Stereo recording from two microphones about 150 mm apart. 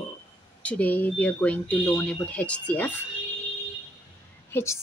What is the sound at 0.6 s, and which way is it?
Speech, 10° left (ahead or behind).